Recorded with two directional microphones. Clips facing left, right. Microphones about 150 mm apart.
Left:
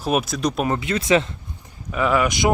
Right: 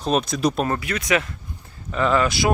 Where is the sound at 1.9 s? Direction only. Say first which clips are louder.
Even; 10° left (ahead or behind).